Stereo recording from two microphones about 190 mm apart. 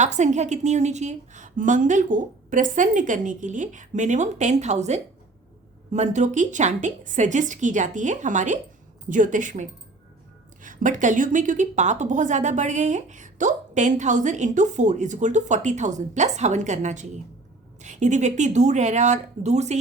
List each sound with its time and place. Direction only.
0.0 s a woman's voice: 40° right (ahead or behind)